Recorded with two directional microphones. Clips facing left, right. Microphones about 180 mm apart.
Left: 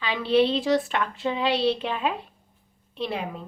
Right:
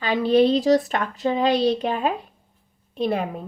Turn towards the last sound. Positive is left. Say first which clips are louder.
# right 7 dB
turn(degrees=-50)  # may be behind; listen again after turning